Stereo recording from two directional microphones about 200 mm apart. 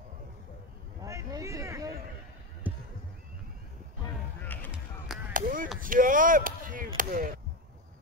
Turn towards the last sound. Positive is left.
turn(degrees=-45)  # may be behind; listen again after turning